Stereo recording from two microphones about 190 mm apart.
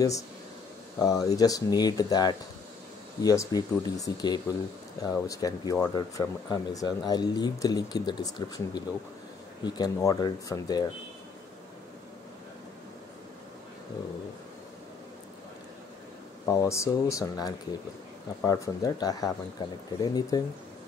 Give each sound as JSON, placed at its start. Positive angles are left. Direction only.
{"t": 0.9, "sound": "speech", "side_deg": 20}
{"t": 16.4, "sound": "speech", "side_deg": 15}